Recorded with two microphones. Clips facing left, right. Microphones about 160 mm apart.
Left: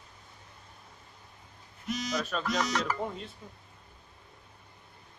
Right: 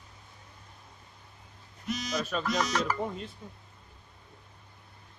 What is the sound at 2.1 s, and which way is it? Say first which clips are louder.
Speech: right 2 dB; 5° right (ahead or behind).